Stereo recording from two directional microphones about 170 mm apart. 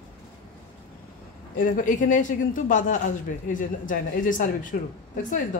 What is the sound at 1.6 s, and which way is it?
A woman's voice, 50° left (ahead or behind).